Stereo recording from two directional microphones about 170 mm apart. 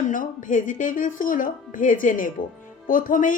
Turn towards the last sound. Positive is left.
turn(degrees=50)  # may be behind; listen again after turning